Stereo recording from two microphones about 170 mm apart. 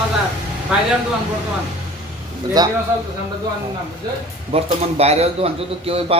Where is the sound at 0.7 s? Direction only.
5° right (ahead or behind).